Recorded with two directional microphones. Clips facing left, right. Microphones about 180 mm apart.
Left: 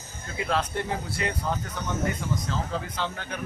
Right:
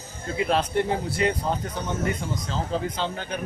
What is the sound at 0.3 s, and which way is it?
A man's voice, 25° right (ahead or behind).